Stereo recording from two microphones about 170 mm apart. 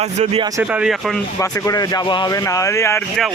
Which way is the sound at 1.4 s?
20° left (ahead or behind).